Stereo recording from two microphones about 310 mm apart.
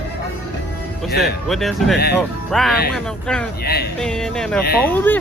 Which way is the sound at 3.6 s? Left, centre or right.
Left.